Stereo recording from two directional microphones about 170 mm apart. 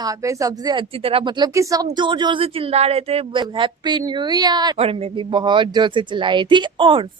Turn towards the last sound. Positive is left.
turn(degrees=-30)  # may be behind; listen again after turning